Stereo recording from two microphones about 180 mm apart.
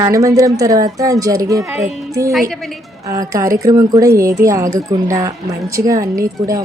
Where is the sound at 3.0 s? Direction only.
20° right (ahead or behind).